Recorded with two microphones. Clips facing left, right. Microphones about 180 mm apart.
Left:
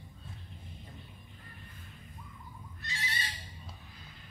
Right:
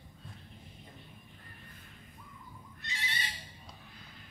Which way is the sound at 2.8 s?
20° right (ahead or behind).